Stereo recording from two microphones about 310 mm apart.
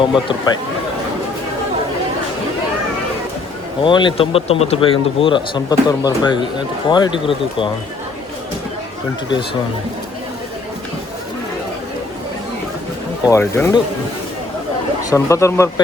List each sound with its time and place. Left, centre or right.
0.0 s speech: centre
3.8 s speech: centre
13.2 s speech: centre
15.1 s speech: centre